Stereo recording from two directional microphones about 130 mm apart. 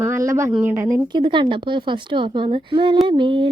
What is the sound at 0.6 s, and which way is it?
Speech, 15° right (ahead or behind).